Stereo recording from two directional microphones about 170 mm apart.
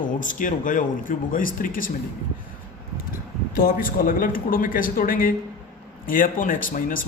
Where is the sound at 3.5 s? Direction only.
55° left (ahead or behind).